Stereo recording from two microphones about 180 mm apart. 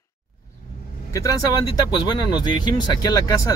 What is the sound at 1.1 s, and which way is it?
Speech, 20° left (ahead or behind).